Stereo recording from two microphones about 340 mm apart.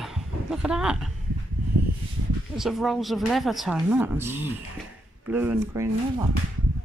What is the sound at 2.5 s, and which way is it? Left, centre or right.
Speech, centre.